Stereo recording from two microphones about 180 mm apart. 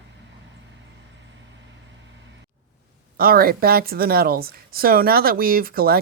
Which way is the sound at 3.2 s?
55° right (ahead or behind).